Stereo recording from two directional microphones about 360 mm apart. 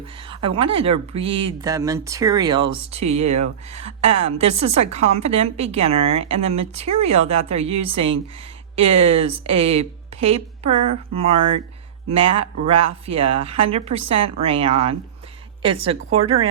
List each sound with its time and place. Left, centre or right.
0.2 s speech: centre